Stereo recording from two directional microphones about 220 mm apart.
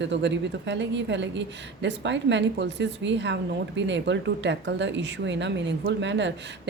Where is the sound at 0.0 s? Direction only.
55° right (ahead or behind).